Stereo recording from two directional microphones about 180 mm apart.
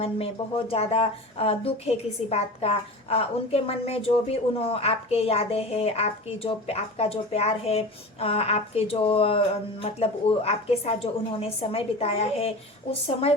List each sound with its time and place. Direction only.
0.7 s a woman's voice: 35° left (ahead or behind)